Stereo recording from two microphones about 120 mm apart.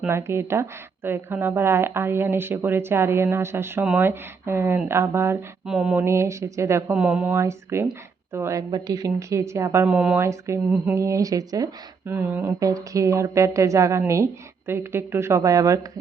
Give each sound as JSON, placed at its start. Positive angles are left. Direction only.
{"t": 0.1, "sound": "speech", "side_deg": -20}
{"t": 5.6, "sound": "speech", "side_deg": -5}
{"t": 6.1, "sound": "speech", "side_deg": -25}
{"t": 6.9, "sound": "speech", "side_deg": -10}
{"t": 7.3, "sound": "speech", "side_deg": -20}
{"t": 9.8, "sound": "speech", "side_deg": -10}
{"t": 10.2, "sound": "speech", "side_deg": -25}
{"t": 12.1, "sound": "speech", "side_deg": -15}
{"t": 12.5, "sound": "speech", "side_deg": -30}